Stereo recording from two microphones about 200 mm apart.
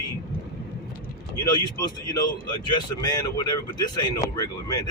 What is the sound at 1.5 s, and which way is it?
Speech, 20° left (ahead or behind).